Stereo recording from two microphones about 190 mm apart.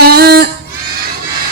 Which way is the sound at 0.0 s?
55° right (ahead or behind).